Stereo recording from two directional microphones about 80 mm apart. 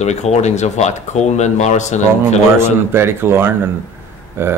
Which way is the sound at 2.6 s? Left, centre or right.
Right.